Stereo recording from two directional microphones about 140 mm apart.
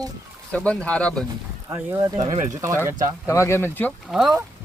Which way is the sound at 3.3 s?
20° left (ahead or behind).